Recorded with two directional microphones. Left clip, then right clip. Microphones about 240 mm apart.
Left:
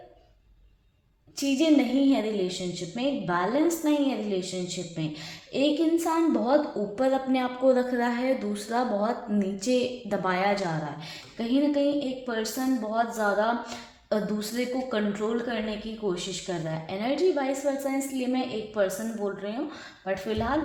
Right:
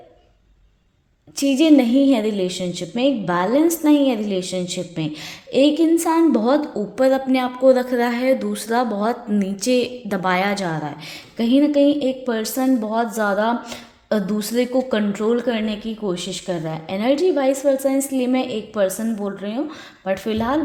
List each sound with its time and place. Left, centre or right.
1.4 s a woman's voice: right